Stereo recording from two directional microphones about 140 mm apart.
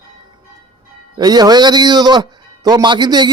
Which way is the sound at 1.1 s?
30° right (ahead or behind).